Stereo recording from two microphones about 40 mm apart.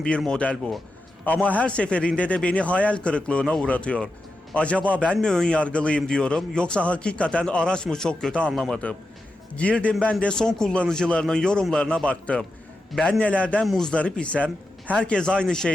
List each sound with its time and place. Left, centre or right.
0.3 s speech: left
5.1 s speech: centre
5.5 s speech: left
6.0 s speech: centre
8.3 s speech: left
8.5 s speech: centre
9.6 s speech: left
10.3 s speech: centre